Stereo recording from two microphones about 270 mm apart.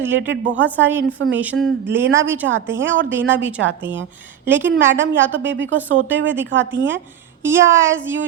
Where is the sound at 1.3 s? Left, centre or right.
Centre.